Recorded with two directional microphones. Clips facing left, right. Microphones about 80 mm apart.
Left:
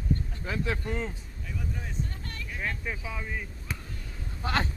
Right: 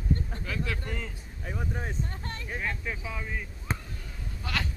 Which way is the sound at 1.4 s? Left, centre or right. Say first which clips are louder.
Right 3 dB; right.